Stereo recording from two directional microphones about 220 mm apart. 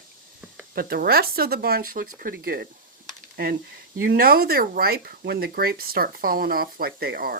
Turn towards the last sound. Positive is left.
turn(degrees=-45)  # may be behind; listen again after turning